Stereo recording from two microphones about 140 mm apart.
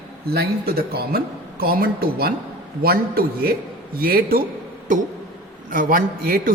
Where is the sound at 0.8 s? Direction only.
90° right.